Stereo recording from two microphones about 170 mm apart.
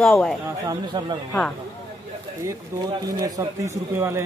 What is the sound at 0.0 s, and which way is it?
Speech, 5° left (ahead or behind).